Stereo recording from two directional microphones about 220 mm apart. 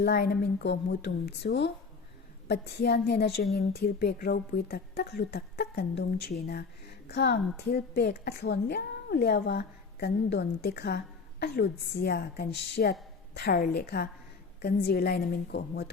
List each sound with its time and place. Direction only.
0.0 s a woman's voice: 45° left (ahead or behind)